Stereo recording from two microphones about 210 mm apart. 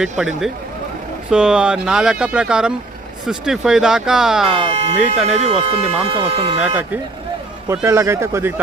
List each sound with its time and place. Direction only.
0.0 s speech: centre (ahead or behind)
4.4 s speech: 25° right (ahead or behind)
7.7 s speech: 15° right (ahead or behind)